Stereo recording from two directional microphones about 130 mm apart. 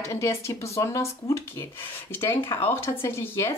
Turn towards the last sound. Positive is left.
turn(degrees=20)  # may be behind; listen again after turning